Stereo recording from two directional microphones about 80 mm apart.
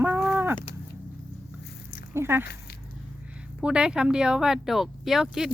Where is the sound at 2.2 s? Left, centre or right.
Right.